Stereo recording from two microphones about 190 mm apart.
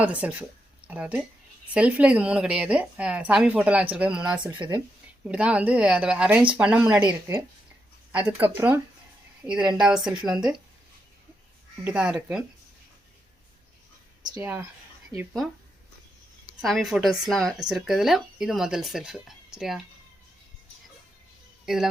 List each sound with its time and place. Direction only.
0.0 s a woman's voice: 10° right (ahead or behind)
4.4 s speech: 20° right (ahead or behind)
5.2 s a woman's voice: 5° right (ahead or behind)
11.9 s speech: 5° right (ahead or behind)
14.3 s a woman's voice: 10° right (ahead or behind)
16.6 s speech: centre (ahead or behind)
21.7 s speech: centre (ahead or behind)